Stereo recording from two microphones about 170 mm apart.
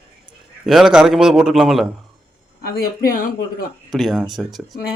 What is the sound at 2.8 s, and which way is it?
Speech, 60° left (ahead or behind).